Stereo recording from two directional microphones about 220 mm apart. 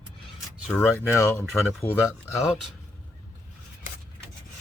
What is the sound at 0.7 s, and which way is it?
Speech, 10° left (ahead or behind).